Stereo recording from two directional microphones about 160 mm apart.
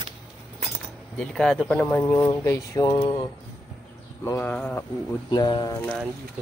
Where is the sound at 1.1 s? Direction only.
5° left (ahead or behind); by 3.3 s 25° left (ahead or behind).